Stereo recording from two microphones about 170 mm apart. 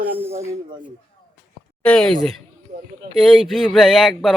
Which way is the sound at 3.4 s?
Centre (ahead or behind).